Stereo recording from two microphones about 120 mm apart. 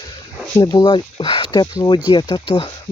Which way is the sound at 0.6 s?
35° left (ahead or behind).